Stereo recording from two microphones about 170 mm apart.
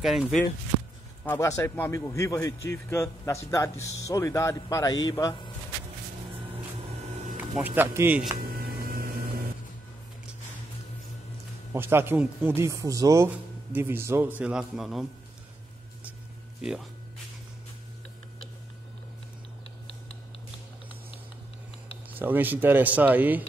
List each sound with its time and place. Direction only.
0.0 s speech: centre (ahead or behind)
1.2 s a man's voice: 15° left (ahead or behind)
7.3 s speech: 10° right (ahead or behind)
8.8 s vehicle: 60° right (ahead or behind)
11.7 s speech: 15° right (ahead or behind)
22.1 s speech: 10° right (ahead or behind)